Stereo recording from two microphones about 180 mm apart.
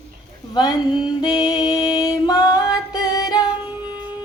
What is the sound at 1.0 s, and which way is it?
Music, 25° left (ahead or behind).